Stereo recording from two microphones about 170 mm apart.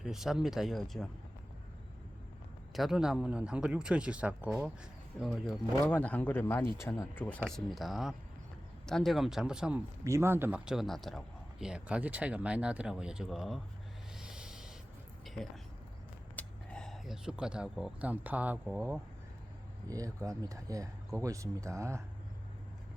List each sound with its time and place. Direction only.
0.0 s speech: centre (ahead or behind)
2.7 s speech: centre (ahead or behind)
5.8 s speech: 10° left (ahead or behind)
10.0 s speech: 15° right (ahead or behind)
14.2 s a sound: 5° right (ahead or behind)
16.3 s speech: 10° left (ahead or behind); by 22.0 s 15° right (ahead or behind)